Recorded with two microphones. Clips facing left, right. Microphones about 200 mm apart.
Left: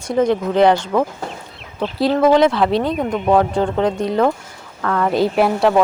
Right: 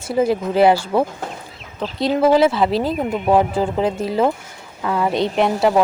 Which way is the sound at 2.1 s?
5° right (ahead or behind).